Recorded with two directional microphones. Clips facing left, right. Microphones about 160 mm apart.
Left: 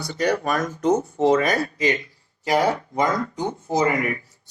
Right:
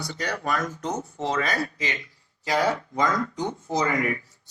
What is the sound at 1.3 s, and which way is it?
Speech, 20° left (ahead or behind).